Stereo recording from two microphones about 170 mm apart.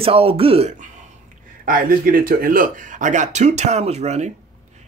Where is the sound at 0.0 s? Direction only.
35° right (ahead or behind).